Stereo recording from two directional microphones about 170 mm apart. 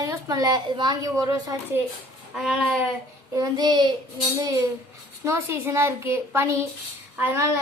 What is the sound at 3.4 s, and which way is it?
A woman's voice, 25° right (ahead or behind).